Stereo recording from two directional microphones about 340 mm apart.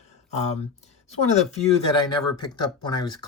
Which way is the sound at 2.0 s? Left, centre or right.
Centre.